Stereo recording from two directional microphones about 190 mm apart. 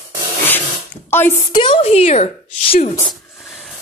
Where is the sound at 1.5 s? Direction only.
25° left (ahead or behind).